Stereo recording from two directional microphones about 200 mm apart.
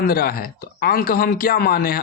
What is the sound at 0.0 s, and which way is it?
Speech, 45° left (ahead or behind).